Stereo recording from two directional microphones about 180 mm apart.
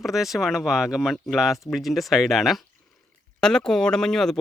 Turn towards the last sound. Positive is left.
turn(degrees=5)  # may be behind; listen again after turning